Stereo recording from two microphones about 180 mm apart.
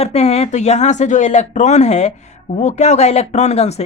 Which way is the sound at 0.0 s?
35° left (ahead or behind).